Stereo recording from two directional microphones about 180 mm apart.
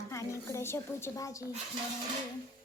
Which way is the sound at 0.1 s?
15° left (ahead or behind).